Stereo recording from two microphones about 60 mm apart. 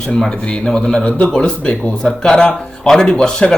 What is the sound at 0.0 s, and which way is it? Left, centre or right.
Speech, centre.